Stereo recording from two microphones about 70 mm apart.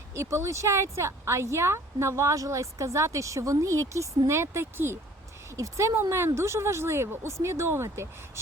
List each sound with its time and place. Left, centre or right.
0.1 s speech: right
5.5 s speech: right